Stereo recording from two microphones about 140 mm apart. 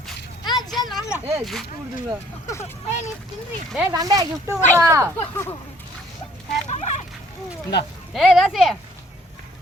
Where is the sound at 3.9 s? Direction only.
25° right (ahead or behind).